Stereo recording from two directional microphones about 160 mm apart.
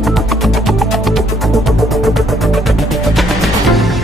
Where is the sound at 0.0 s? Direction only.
Centre (ahead or behind).